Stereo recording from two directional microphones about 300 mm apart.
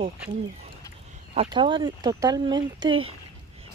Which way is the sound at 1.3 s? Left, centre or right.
Centre.